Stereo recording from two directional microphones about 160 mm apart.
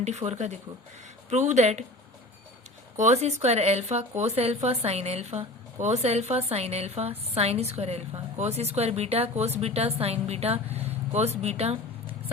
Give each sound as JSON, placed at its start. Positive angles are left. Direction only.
{"t": 0.0, "sound": "speech", "side_deg": -45}
{"t": 3.0, "sound": "a woman's voice", "side_deg": -45}